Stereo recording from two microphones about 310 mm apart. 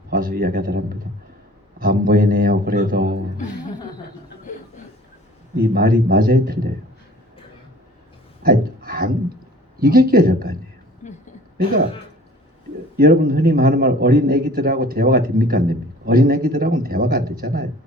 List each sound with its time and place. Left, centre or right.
0.1 s a man's voice: right
5.7 s a man's voice: right
8.4 s a sound: right
9.8 s a man's voice: right
13.0 s a man's voice: right